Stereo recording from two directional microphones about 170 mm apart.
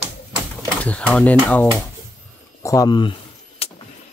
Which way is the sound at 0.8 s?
5° left (ahead or behind).